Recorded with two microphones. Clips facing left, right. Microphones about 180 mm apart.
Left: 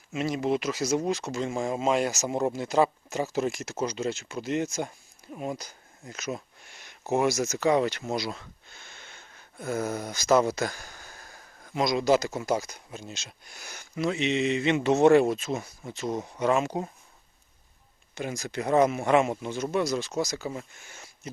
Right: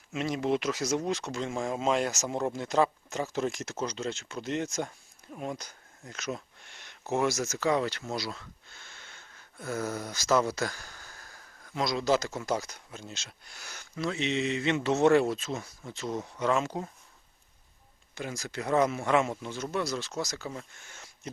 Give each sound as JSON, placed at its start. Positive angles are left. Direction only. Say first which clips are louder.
{"t": 0.1, "sound": "speech", "louder": "left 2 dB", "side_deg": 5}
{"t": 18.1, "sound": "speech", "louder": "left 4 dB", "side_deg": 20}